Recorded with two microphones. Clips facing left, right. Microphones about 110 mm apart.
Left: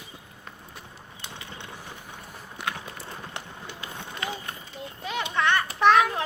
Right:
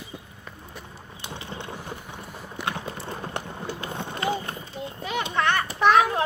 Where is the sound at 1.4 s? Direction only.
35° right (ahead or behind).